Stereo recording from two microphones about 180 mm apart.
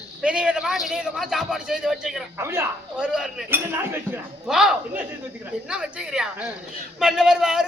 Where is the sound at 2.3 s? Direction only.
15° right (ahead or behind).